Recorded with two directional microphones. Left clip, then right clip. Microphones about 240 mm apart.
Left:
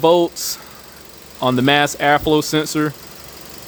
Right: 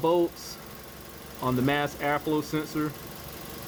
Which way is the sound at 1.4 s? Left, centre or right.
Left.